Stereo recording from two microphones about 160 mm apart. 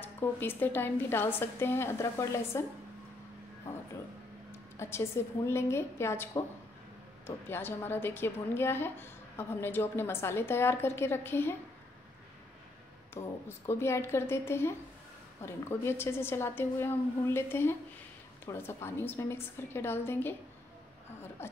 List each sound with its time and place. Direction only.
0.0 s a woman's voice: 15° left (ahead or behind)
3.7 s a sound: 15° left (ahead or behind)
4.5 s a woman's voice: 15° left (ahead or behind)
13.1 s a woman's voice: 15° left (ahead or behind)
21.4 s a woman's voice: 15° left (ahead or behind)